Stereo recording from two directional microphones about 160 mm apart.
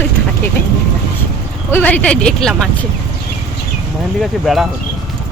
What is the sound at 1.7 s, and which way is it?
Speech, 10° left (ahead or behind).